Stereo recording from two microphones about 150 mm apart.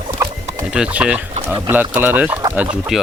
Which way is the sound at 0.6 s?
5° right (ahead or behind).